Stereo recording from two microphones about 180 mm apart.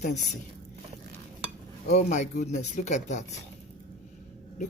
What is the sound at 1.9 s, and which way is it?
Speech, 40° left (ahead or behind).